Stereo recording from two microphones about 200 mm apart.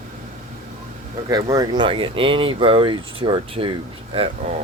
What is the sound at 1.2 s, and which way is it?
Speech, 20° right (ahead or behind).